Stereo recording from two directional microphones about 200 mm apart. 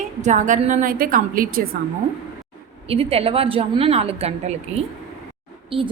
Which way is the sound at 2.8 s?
30° right (ahead or behind).